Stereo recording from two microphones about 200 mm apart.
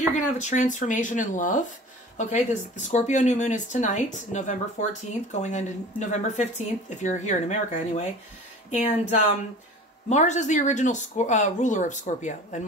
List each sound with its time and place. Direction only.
0.1 s speech: 35° left (ahead or behind)